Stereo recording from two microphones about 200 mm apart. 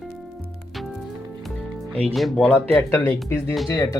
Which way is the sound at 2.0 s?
Centre (ahead or behind).